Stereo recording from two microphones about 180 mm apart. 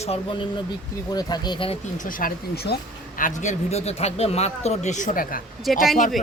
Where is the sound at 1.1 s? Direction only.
25° left (ahead or behind).